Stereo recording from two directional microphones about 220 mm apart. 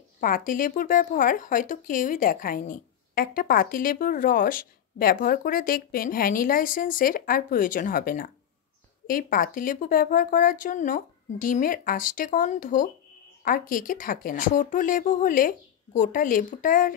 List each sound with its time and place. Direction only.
0.2 s speech: 40° left (ahead or behind)